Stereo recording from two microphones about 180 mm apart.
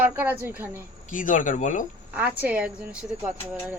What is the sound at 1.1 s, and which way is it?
Speech, 45° left (ahead or behind).